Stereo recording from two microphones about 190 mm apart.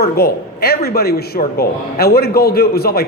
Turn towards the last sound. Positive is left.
turn(degrees=55)  # may be behind; listen again after turning